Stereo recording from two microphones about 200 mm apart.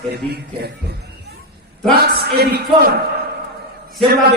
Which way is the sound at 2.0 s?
50° right (ahead or behind).